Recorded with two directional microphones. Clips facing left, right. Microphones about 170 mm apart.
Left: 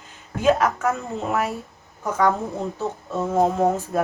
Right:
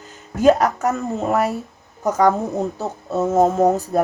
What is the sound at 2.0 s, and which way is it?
Speech, 40° right (ahead or behind).